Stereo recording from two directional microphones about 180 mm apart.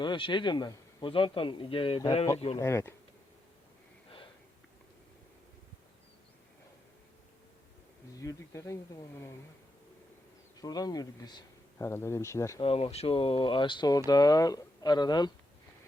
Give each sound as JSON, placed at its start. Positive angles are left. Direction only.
{"t": 0.0, "sound": "speech", "side_deg": 25}
{"t": 2.6, "sound": "speech", "side_deg": 15}
{"t": 8.2, "sound": "speech", "side_deg": 15}
{"t": 10.6, "sound": "speech", "side_deg": 20}
{"t": 12.5, "sound": "speech", "side_deg": 30}